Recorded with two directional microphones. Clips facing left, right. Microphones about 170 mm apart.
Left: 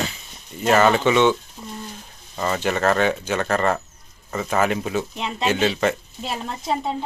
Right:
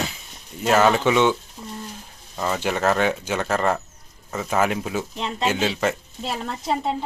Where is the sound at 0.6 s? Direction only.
5° right (ahead or behind).